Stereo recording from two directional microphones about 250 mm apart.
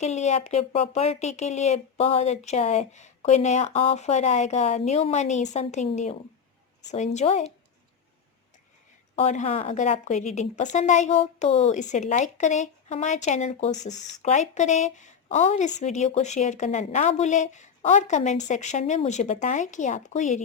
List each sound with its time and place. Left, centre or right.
0.0 s speech: left
9.1 s speech: left